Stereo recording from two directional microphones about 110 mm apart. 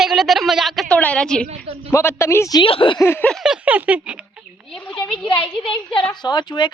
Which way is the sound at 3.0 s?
25° left (ahead or behind).